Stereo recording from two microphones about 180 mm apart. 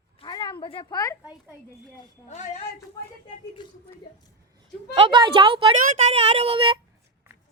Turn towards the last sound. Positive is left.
turn(degrees=-30)  # may be behind; listen again after turning